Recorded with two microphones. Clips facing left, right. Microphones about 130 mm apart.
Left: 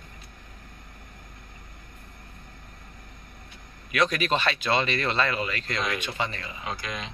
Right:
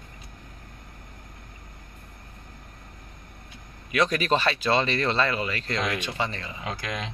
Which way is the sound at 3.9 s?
35° right (ahead or behind).